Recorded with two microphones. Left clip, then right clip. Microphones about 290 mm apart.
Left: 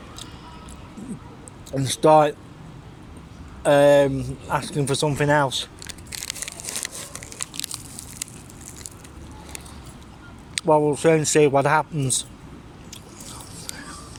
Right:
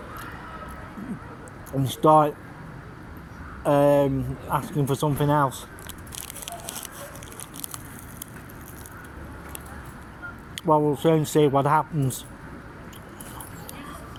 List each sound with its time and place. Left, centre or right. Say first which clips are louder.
1.8 s speech: left 3 dB; centre
2.0 s speech: left 2 dB; left
3.6 s speech: left 4 dB; left
10.5 s speech: left 3 dB; left